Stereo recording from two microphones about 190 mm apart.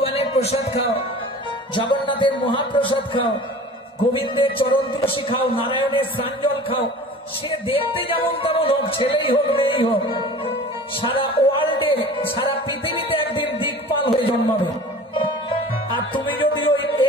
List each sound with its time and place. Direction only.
0.0 s music: 30° left (ahead or behind)
4.4 s music: 30° left (ahead or behind)
16.1 s music: 25° left (ahead or behind)